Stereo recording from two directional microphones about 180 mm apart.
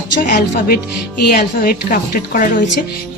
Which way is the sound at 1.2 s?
60° left (ahead or behind).